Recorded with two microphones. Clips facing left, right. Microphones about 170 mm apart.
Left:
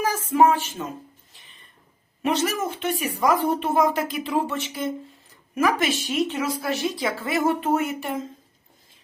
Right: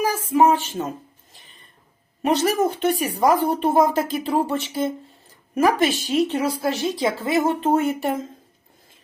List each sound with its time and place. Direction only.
0.5 s speech: 30° right (ahead or behind)
2.2 s speech: 35° right (ahead or behind)